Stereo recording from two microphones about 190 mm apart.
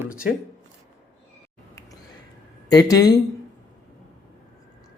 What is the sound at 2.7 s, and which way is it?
Speech, 20° left (ahead or behind).